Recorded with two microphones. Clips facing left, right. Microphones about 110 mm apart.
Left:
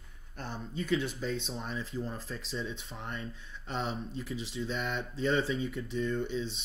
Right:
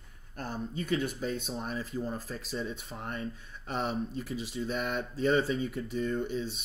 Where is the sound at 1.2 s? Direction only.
5° right (ahead or behind).